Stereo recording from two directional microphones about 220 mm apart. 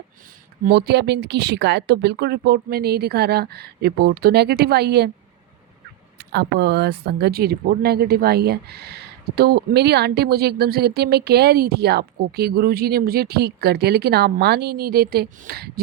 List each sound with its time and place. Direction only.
0.6 s speech: 50° right (ahead or behind)
6.1 s speech: 50° right (ahead or behind)